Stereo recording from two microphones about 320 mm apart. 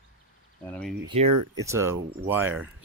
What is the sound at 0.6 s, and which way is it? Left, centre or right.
Speech, centre.